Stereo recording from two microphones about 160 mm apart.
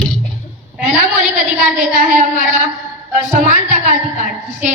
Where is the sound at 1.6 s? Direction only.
55° right (ahead or behind).